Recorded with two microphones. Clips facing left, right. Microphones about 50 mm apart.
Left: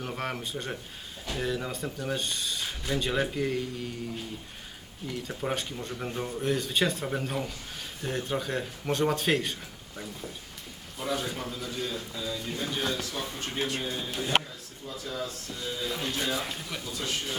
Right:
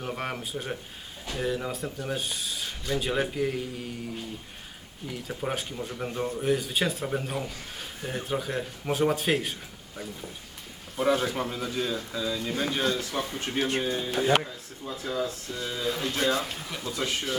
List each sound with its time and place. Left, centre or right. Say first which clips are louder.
0.0 s speech: right 1 dB; centre
5.0 s speech: even; centre
10.9 s speech: right 7 dB; right
12.7 s speech: right 3 dB; right
13.0 s speech: right 3 dB; right
13.6 s speech: right 5 dB; right
16.1 s speech: right 7 dB; right